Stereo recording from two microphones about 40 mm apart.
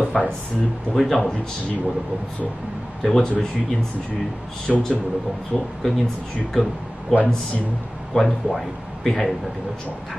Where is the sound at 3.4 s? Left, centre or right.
Centre.